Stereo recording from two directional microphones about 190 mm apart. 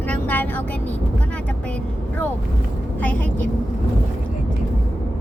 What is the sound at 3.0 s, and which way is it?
Speech, 10° left (ahead or behind).